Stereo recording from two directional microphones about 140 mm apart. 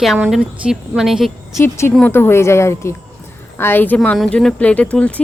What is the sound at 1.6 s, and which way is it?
Speech, 15° left (ahead or behind).